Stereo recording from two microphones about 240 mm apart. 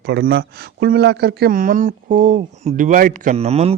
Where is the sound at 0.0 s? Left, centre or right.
Right.